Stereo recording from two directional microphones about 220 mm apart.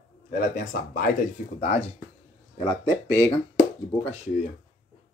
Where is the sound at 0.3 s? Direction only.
40° left (ahead or behind).